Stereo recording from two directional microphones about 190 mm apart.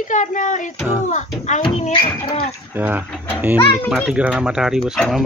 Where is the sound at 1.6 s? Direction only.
35° left (ahead or behind).